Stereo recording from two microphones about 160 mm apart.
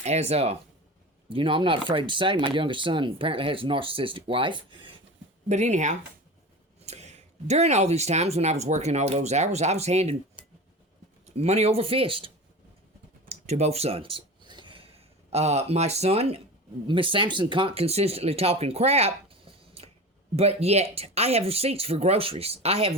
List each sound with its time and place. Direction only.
0.0 s speech: 45° right (ahead or behind)
5.5 s speech: 45° right (ahead or behind)
13.2 s a sound: 40° right (ahead or behind)
16.8 s speech: 30° right (ahead or behind)